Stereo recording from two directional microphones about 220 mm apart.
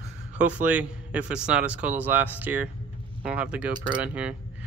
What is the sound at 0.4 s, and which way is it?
Speech, 5° right (ahead or behind).